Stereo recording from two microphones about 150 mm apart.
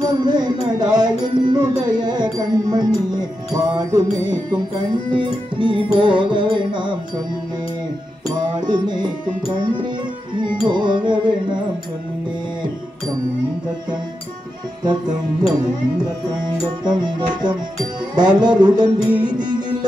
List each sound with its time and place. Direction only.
0.0 s music: 30° right (ahead or behind)
8.3 s music: 30° right (ahead or behind)
14.9 s music: 30° right (ahead or behind)
16.8 s music: 30° right (ahead or behind)